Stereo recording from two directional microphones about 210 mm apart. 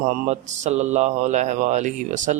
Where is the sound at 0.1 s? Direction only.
35° right (ahead or behind).